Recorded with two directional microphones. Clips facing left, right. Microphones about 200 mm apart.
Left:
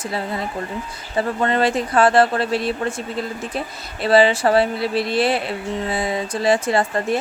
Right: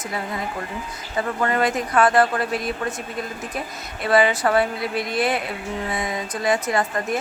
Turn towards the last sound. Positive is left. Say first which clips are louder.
# left 3 dB
turn(degrees=30)  # may be behind; listen again after turning